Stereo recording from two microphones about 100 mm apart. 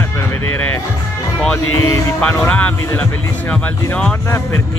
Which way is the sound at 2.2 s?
10° left (ahead or behind).